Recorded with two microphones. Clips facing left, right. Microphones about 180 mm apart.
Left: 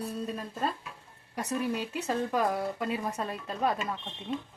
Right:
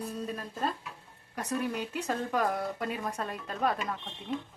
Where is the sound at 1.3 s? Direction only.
10° left (ahead or behind).